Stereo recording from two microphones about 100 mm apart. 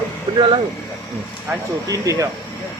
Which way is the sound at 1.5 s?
20° right (ahead or behind).